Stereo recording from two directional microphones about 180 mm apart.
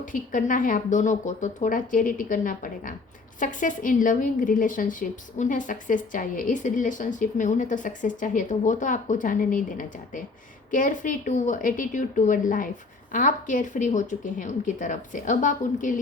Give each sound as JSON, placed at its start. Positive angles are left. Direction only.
{"t": 0.0, "sound": "speech", "side_deg": 45}